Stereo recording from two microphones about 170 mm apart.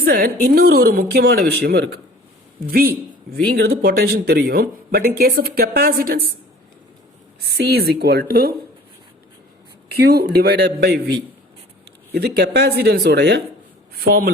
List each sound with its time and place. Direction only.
0.0 s a woman's voice: 60° right (ahead or behind)
2.6 s speech: 60° right (ahead or behind)
7.4 s speech: 70° right (ahead or behind)
9.9 s speech: 65° right (ahead or behind)
12.1 s speech: 70° right (ahead or behind)
13.9 s speech: 60° right (ahead or behind)